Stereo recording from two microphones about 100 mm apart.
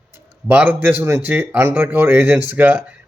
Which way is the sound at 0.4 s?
20° right (ahead or behind).